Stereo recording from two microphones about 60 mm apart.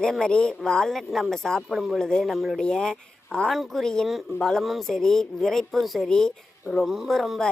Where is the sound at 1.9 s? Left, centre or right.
Centre.